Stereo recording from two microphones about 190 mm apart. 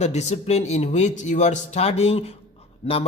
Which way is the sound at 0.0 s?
35° left (ahead or behind).